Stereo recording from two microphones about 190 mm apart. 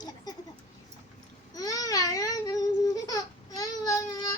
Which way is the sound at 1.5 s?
20° left (ahead or behind).